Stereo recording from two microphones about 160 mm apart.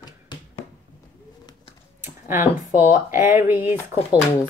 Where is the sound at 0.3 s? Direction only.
30° left (ahead or behind).